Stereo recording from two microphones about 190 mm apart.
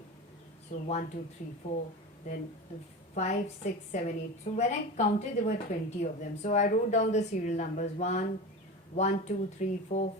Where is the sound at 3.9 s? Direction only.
40° left (ahead or behind).